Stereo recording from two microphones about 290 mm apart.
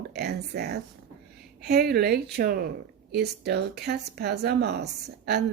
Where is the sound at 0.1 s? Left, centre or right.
Right.